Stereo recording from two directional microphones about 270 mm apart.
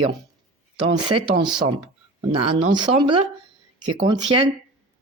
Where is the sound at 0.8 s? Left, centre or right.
Centre.